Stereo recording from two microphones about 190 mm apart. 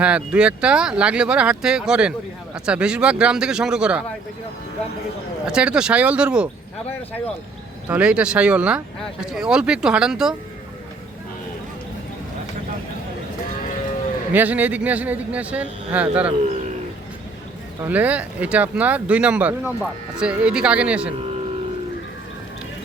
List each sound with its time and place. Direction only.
0.0 s speech: 5° right (ahead or behind)
5.5 s speech: 5° right (ahead or behind)
7.9 s speech: 5° right (ahead or behind)
14.3 s speech: 10° right (ahead or behind)
17.8 s speech: 10° right (ahead or behind)